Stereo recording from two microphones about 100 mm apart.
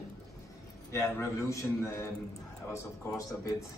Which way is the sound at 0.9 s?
30° left (ahead or behind).